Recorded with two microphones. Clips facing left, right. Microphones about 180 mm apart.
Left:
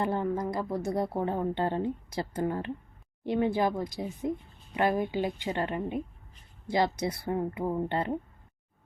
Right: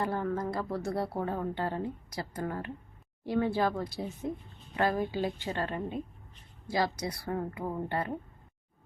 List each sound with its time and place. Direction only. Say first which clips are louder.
0.0 s a woman's voice: left 2 dB; 20° left (ahead or behind)